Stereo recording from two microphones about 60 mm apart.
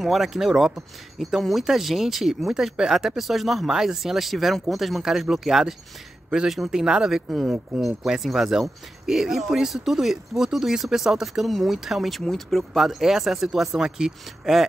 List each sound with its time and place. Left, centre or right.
0.0 s speech: centre